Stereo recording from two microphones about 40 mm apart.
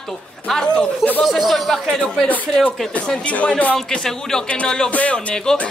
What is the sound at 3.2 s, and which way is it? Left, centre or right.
Speech, left.